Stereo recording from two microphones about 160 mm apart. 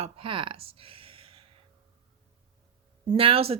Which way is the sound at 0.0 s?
35° right (ahead or behind).